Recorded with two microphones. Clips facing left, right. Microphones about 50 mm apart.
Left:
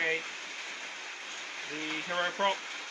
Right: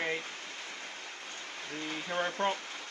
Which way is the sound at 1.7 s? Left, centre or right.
Left.